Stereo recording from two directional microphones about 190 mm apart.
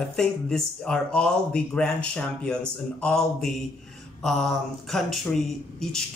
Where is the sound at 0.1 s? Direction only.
5° left (ahead or behind).